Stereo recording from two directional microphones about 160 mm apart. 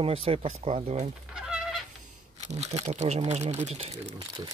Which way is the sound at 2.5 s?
45° right (ahead or behind).